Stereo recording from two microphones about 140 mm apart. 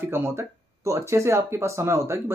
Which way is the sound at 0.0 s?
15° right (ahead or behind).